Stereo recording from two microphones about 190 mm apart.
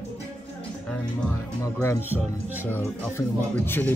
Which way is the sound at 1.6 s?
15° left (ahead or behind).